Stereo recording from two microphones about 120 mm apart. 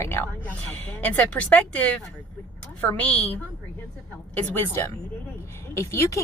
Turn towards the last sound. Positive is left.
turn(degrees=25)  # may be behind; listen again after turning